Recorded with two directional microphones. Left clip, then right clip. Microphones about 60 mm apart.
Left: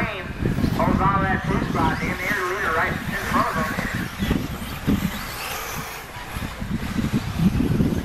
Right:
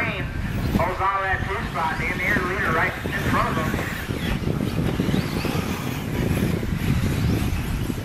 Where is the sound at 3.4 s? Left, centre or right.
Centre.